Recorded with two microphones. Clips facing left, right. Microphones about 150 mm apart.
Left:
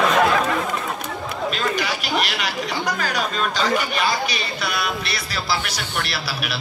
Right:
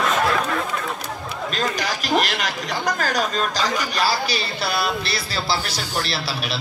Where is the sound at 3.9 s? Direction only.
30° right (ahead or behind).